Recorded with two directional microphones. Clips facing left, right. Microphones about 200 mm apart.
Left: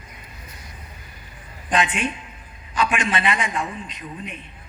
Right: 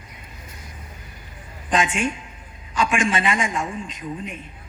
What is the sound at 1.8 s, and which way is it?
A man's voice, 45° right (ahead or behind).